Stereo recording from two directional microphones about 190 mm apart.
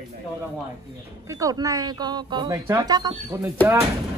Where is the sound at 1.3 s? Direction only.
20° right (ahead or behind).